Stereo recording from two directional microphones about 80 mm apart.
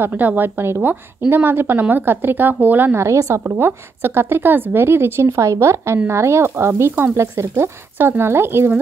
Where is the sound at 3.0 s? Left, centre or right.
Right.